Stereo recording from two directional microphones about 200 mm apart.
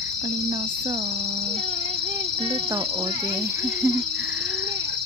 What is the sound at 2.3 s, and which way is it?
Speech, 30° right (ahead or behind).